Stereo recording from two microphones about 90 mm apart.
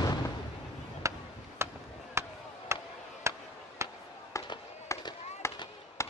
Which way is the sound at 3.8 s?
30° right (ahead or behind).